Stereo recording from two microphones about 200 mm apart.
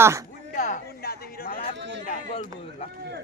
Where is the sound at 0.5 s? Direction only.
45° left (ahead or behind).